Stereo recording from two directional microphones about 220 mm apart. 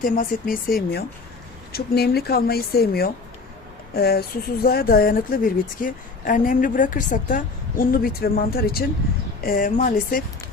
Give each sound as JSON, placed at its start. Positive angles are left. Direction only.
{"t": 0.0, "sound": "a woman's voice", "side_deg": 40}